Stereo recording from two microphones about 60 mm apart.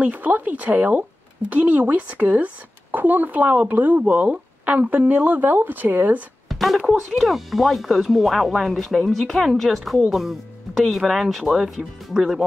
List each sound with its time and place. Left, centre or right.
0.0 s speech: right
6.5 s a sound: centre
7.0 s speech: centre